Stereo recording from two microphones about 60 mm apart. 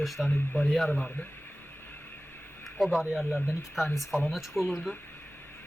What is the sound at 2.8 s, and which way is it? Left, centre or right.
Speech, centre.